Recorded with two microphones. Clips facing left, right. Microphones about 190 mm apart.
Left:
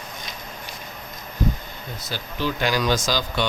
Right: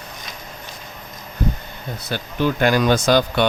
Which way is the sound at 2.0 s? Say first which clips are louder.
Right 6 dB; 55° right (ahead or behind).